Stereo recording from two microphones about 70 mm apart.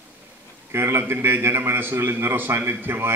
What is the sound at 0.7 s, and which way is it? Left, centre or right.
A man's voice, right.